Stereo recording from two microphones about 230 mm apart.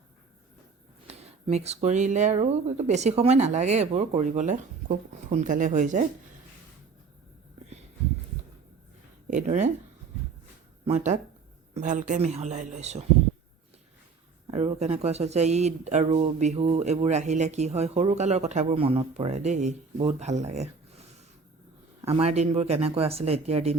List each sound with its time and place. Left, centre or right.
1.0 s speech: right
9.2 s speech: right
10.8 s speech: right
14.4 s speech: right
22.0 s speech: right